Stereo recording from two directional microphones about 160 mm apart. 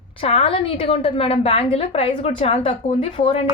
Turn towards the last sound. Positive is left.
turn(degrees=35)  # may be behind; listen again after turning